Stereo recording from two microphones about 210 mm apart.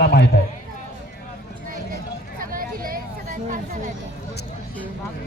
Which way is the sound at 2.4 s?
45° right (ahead or behind).